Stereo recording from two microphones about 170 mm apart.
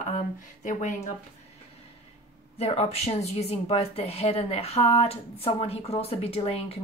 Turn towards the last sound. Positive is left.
turn(degrees=35)  # may be behind; listen again after turning